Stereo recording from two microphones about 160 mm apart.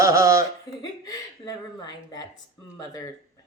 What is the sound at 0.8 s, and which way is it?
Speech, 25° left (ahead or behind).